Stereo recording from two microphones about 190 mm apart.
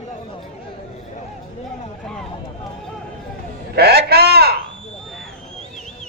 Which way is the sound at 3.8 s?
55° right (ahead or behind).